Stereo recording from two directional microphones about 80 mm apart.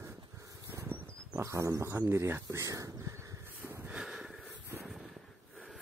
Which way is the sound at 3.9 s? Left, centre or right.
Centre.